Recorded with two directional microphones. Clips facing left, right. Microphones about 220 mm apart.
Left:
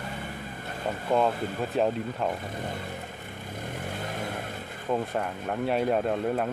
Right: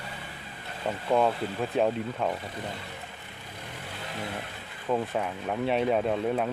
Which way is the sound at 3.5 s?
50° left (ahead or behind).